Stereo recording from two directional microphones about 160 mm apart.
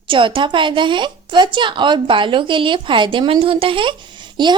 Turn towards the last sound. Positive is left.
turn(degrees=-30)  # may be behind; listen again after turning